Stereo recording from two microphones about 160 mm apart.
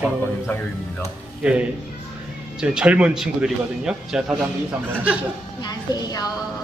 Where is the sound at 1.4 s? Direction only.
10° right (ahead or behind).